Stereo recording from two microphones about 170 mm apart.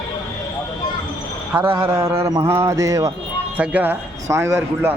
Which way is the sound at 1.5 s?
10° right (ahead or behind).